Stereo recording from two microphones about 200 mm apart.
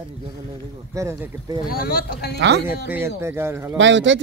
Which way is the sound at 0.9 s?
15° right (ahead or behind).